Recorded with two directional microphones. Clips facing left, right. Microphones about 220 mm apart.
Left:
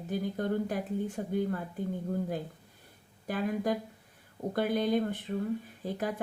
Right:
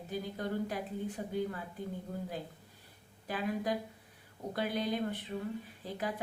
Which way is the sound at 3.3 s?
50° left (ahead or behind).